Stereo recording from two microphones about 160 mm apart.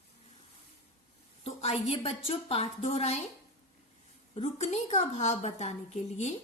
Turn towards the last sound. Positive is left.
turn(degrees=45)  # may be behind; listen again after turning